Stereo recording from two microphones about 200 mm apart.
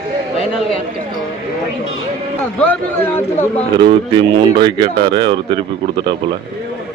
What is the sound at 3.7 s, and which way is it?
Speech, 25° right (ahead or behind).